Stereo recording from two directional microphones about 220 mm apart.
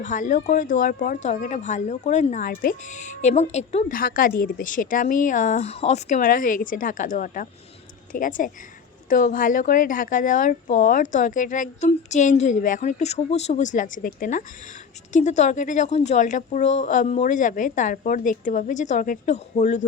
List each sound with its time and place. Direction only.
0.0 s speech: 35° left (ahead or behind)